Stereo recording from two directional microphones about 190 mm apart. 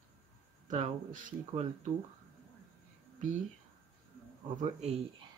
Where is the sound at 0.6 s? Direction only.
40° right (ahead or behind).